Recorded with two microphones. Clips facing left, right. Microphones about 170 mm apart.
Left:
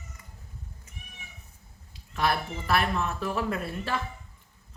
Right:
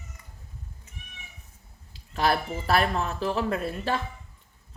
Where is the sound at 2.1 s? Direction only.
35° right (ahead or behind).